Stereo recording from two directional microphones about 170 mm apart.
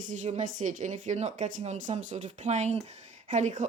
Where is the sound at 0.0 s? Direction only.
45° right (ahead or behind).